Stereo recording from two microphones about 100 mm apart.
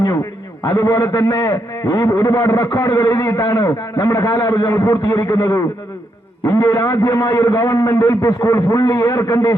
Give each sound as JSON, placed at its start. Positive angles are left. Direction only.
{"t": 0.6, "sound": "a man's voice", "side_deg": 35}